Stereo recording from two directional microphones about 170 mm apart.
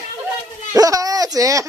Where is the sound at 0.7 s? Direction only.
20° right (ahead or behind).